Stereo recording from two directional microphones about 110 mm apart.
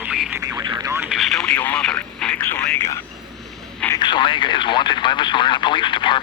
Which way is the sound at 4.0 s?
45° left (ahead or behind).